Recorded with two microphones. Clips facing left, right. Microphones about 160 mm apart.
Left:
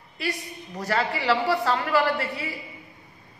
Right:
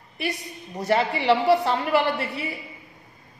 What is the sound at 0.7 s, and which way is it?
A man's voice, 25° right (ahead or behind).